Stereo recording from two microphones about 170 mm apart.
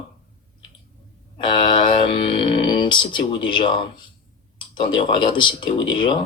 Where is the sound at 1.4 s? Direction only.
30° left (ahead or behind).